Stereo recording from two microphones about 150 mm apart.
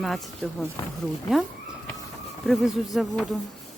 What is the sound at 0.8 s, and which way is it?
Speech, 20° left (ahead or behind).